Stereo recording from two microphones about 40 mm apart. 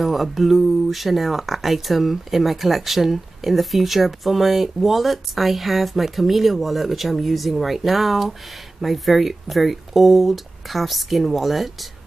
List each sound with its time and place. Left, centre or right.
0.0 s speech: centre